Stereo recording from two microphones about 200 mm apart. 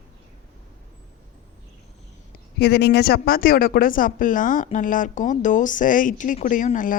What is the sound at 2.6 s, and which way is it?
Speech, 55° left (ahead or behind).